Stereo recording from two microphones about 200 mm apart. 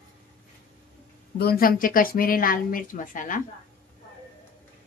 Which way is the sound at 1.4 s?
50° left (ahead or behind).